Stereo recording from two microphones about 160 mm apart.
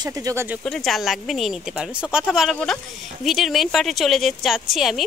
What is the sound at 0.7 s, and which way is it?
Speech, centre (ahead or behind).